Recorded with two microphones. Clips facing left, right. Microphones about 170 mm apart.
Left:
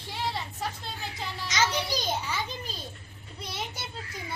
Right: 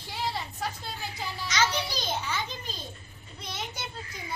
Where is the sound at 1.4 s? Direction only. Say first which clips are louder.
Left 1 dB; 20° left (ahead or behind).